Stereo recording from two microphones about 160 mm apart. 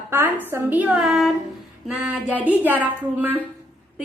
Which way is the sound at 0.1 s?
15° right (ahead or behind).